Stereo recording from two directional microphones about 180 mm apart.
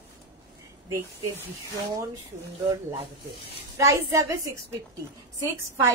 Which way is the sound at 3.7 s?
15° right (ahead or behind).